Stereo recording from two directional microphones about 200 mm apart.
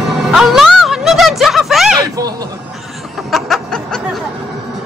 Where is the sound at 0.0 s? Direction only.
Centre (ahead or behind).